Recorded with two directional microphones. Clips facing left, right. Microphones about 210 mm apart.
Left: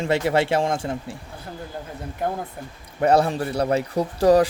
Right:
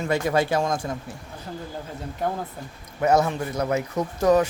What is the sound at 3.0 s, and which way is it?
Speech, 30° left (ahead or behind).